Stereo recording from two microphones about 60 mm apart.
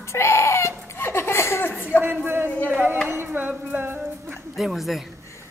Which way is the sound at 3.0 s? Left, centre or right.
Right.